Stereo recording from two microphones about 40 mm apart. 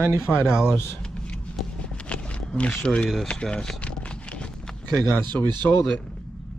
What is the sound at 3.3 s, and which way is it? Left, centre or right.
Speech, centre.